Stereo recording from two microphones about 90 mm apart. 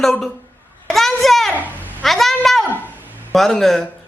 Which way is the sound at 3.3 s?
Centre (ahead or behind).